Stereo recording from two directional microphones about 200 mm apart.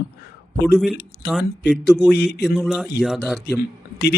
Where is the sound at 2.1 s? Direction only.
55° left (ahead or behind).